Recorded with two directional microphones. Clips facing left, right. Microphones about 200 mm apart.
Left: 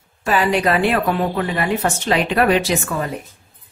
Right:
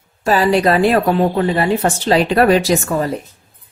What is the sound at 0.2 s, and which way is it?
A woman's voice, 35° right (ahead or behind).